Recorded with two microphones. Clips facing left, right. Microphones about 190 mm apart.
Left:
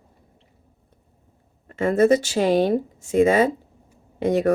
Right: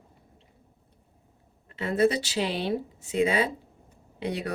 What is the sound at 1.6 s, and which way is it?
Speech, 45° left (ahead or behind).